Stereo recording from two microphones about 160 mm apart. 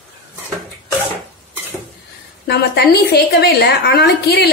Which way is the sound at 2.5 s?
90° left.